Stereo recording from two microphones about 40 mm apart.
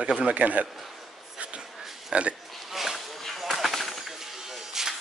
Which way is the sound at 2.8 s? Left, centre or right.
Centre.